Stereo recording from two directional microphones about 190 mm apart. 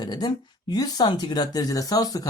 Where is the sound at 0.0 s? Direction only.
20° left (ahead or behind).